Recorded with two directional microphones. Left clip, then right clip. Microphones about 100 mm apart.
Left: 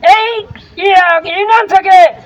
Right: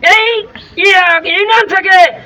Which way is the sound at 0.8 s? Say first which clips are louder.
Even; 30° left (ahead or behind).